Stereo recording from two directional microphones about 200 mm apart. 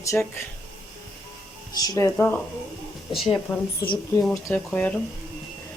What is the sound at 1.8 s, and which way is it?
Speech, 15° left (ahead or behind).